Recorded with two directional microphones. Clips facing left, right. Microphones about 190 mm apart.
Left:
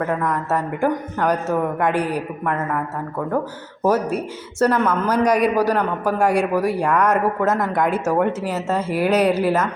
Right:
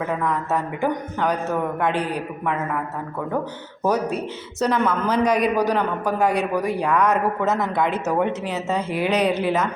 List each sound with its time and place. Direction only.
0.0 s a woman's voice: 5° right (ahead or behind)
0.3 s a man's voice: 10° left (ahead or behind)
4.6 s a man's voice: 5° left (ahead or behind)